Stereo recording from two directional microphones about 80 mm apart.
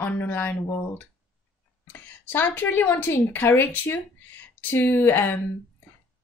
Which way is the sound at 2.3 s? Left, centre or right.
Left.